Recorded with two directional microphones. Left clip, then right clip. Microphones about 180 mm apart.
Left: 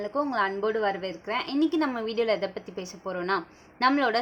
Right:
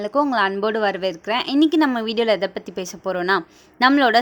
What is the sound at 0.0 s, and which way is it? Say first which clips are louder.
A woman's voice: right 8 dB; 55° right (ahead or behind).